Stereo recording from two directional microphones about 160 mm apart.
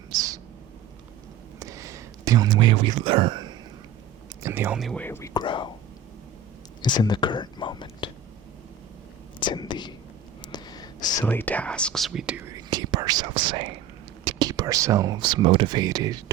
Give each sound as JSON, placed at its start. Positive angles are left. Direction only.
{"t": 0.1, "sound": "owl", "side_deg": -25}
{"t": 1.5, "sound": "a sound", "side_deg": -20}
{"t": 4.4, "sound": "speech", "side_deg": -15}
{"t": 4.8, "sound": "speech", "side_deg": 0}
{"t": 5.0, "sound": "speech", "side_deg": 15}
{"t": 5.3, "sound": "speech", "side_deg": 30}
{"t": 6.8, "sound": "speech", "side_deg": 25}
{"t": 9.4, "sound": "speech", "side_deg": 30}
{"t": 10.4, "sound": "whispering", "side_deg": 25}
{"t": 11.3, "sound": "speech", "side_deg": 10}
{"t": 12.5, "sound": "speech", "side_deg": -25}